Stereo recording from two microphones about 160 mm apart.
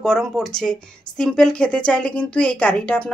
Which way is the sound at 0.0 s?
Centre (ahead or behind).